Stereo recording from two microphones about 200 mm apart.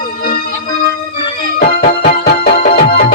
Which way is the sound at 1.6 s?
45° left (ahead or behind).